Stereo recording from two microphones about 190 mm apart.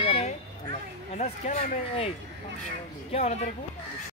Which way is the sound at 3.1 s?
35° left (ahead or behind).